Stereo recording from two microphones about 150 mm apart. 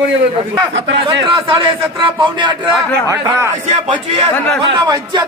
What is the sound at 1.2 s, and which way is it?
A man's voice, 35° right (ahead or behind).